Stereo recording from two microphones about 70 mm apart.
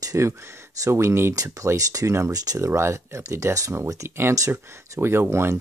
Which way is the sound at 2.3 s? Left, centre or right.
Right.